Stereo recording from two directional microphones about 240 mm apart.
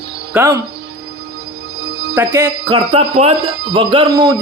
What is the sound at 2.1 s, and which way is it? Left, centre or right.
Speech, centre.